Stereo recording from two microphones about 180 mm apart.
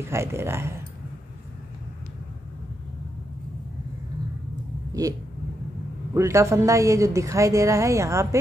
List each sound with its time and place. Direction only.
0.1 s a woman's voice: 15° right (ahead or behind)
6.1 s a woman's voice: 15° right (ahead or behind)